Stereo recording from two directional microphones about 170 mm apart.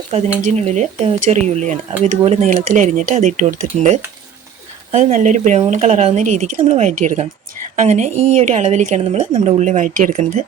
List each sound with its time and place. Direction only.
0.1 s speech: 35° right (ahead or behind)